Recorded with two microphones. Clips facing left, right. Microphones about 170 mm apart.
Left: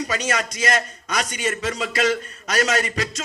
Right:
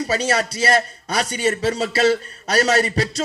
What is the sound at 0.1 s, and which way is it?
A man's voice, 35° right (ahead or behind).